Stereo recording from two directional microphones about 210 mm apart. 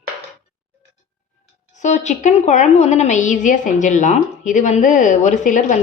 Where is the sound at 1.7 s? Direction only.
35° left (ahead or behind).